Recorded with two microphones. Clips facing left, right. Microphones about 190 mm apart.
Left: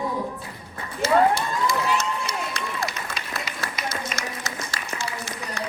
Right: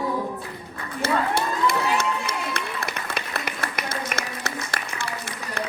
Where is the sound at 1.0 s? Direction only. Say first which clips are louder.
Left 4 dB; 60° right (ahead or behind).